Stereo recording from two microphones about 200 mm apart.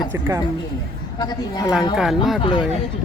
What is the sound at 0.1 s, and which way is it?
Speech, 15° right (ahead or behind).